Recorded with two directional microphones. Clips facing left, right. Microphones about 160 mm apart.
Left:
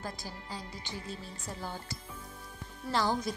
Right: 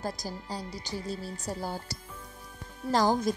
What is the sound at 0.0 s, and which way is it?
A woman's voice, 40° right (ahead or behind).